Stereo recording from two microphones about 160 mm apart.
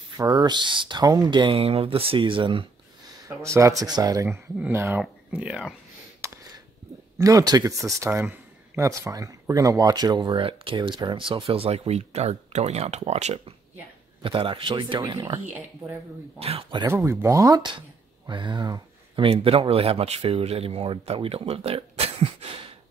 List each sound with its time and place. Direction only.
0.2 s speech: 25° right (ahead or behind)
3.3 s speech: 20° right (ahead or behind)
6.2 s a sound: 20° right (ahead or behind)
7.2 s speech: 20° right (ahead or behind)
16.3 s speech: 40° right (ahead or behind)
16.8 s speech: 20° right (ahead or behind); by 22.1 s 40° right (ahead or behind)